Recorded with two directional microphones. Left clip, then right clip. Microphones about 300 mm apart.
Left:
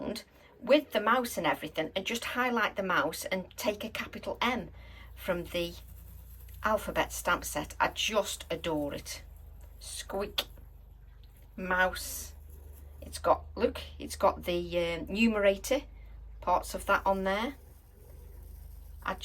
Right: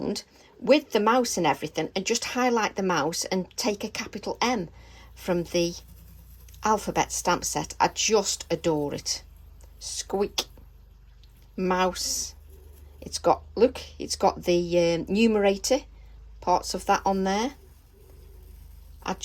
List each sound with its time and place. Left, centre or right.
0.0 s speech: centre
11.5 s speech: centre